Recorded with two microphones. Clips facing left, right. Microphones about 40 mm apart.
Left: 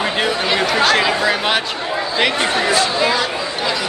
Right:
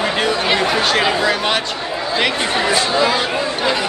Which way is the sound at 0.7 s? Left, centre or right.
Centre.